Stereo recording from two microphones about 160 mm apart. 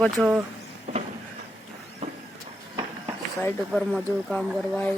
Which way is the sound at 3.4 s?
5° left (ahead or behind).